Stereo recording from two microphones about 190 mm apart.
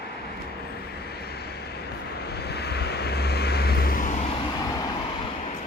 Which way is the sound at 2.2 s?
60° left (ahead or behind).